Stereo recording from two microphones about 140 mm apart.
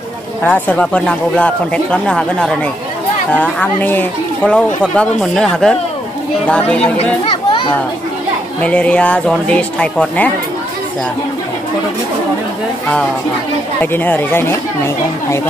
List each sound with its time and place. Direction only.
0.4 s speech: 10° left (ahead or behind)
8.5 s speech: 10° left (ahead or behind)
13.7 s speech: 15° left (ahead or behind)